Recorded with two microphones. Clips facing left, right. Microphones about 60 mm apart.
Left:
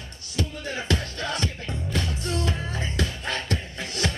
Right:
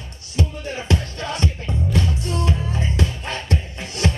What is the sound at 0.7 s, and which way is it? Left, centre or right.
Music, right.